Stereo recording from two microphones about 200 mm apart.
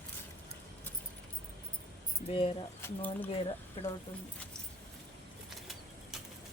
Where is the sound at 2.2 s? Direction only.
30° left (ahead or behind).